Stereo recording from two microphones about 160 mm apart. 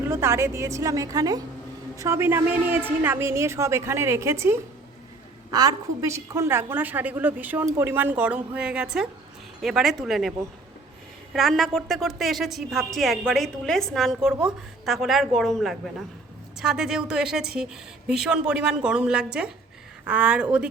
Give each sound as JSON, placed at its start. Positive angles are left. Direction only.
{"t": 0.1, "sound": "a woman's voice", "side_deg": -15}
{"t": 11.3, "sound": "a woman's voice", "side_deg": 0}